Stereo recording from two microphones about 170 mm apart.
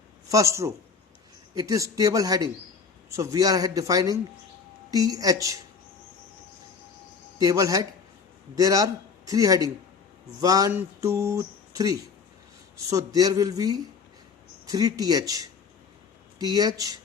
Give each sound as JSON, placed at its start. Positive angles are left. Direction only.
{"t": 0.3, "sound": "a man's voice", "side_deg": -20}
{"t": 7.3, "sound": "a man's voice", "side_deg": -20}
{"t": 16.4, "sound": "a man's voice", "side_deg": -25}